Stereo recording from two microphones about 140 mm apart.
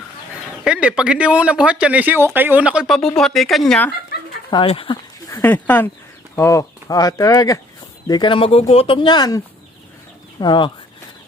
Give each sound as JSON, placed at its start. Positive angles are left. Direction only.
{"t": 0.6, "sound": "speech", "side_deg": -10}
{"t": 4.5, "sound": "speech", "side_deg": 40}
{"t": 5.3, "sound": "speech", "side_deg": 15}
{"t": 10.4, "sound": "speech", "side_deg": 35}